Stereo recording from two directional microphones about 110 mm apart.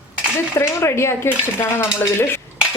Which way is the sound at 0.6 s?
25° left (ahead or behind).